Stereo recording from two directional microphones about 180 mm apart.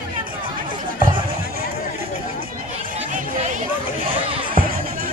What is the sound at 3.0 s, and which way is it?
Chatter, 45° right (ahead or behind).